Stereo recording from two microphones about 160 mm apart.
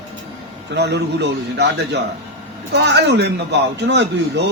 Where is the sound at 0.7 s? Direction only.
90° right.